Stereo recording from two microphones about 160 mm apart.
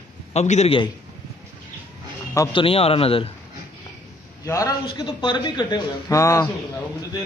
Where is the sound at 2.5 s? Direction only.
35° left (ahead or behind).